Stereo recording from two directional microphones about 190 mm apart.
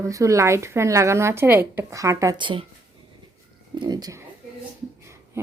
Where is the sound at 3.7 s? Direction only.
20° right (ahead or behind).